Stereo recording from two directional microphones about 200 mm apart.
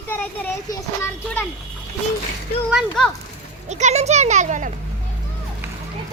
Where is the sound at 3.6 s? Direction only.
35° right (ahead or behind).